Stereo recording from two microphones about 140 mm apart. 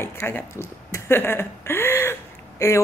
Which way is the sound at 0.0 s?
15° left (ahead or behind).